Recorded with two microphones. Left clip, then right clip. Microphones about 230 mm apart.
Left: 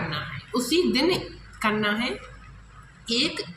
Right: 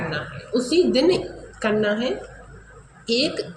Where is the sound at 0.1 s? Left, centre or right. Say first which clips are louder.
Right 4 dB; left.